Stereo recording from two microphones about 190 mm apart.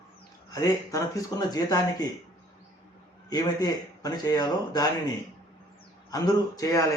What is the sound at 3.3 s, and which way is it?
A man's voice, 20° left (ahead or behind).